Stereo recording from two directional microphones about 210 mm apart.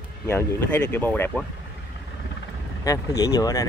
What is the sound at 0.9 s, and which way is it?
Speech, 10° left (ahead or behind).